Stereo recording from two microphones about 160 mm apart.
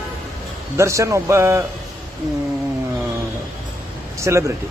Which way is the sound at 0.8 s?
20° right (ahead or behind).